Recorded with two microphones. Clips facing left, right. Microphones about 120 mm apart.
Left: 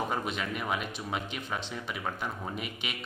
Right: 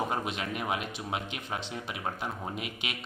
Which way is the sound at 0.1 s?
20° right (ahead or behind).